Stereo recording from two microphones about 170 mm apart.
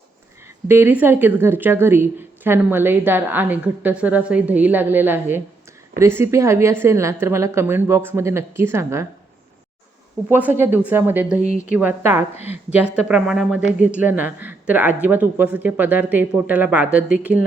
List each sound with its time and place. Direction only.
0.7 s speech: 10° right (ahead or behind)
10.2 s a woman's voice: 10° right (ahead or behind)